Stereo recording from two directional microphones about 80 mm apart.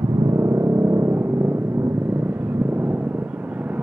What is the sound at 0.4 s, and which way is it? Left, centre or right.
Vehicle, right.